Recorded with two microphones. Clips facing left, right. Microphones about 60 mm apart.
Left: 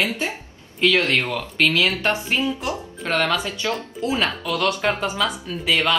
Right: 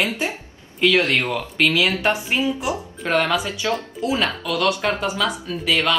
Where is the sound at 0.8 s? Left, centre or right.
Centre.